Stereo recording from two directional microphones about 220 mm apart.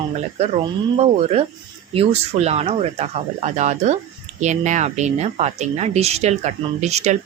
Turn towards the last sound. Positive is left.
turn(degrees=-30)  # may be behind; listen again after turning